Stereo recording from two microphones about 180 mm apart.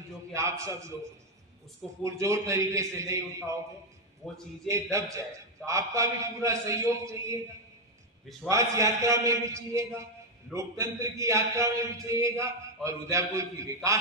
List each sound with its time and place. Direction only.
0.3 s a man's voice: 15° right (ahead or behind)
2.0 s a man's voice: 15° right (ahead or behind)
4.2 s a man's voice: centre (ahead or behind)
5.7 s a man's voice: 15° right (ahead or behind)
8.5 s a man's voice: 15° right (ahead or behind)